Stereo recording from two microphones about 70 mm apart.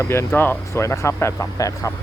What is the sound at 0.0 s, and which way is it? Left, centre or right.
Speech, left.